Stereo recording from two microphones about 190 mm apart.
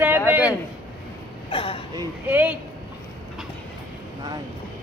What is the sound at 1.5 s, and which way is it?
Speech, 30° left (ahead or behind).